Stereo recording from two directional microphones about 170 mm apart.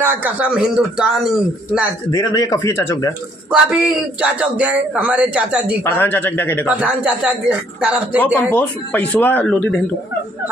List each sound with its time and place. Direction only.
0.0 s speech: 10° right (ahead or behind)
2.0 s a man's voice: 20° left (ahead or behind)
3.4 s a man's voice: 5° right (ahead or behind)
5.9 s speech: 10° left (ahead or behind)
6.7 s a man's voice: 5° right (ahead or behind)
8.4 s speech: 10° left (ahead or behind)